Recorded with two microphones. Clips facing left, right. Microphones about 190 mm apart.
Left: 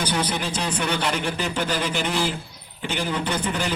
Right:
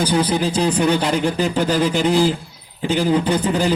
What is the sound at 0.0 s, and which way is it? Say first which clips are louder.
Speech: right 7 dB; 30° right (ahead or behind).